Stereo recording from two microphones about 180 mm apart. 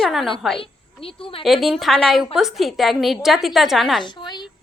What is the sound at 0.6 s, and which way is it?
Speech, 30° left (ahead or behind).